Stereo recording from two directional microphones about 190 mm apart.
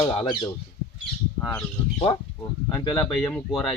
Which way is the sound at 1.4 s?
10° left (ahead or behind).